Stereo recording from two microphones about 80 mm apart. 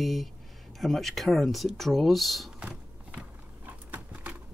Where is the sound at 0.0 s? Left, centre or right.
Centre.